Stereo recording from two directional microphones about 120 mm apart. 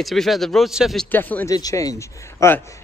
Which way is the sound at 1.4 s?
30° left (ahead or behind).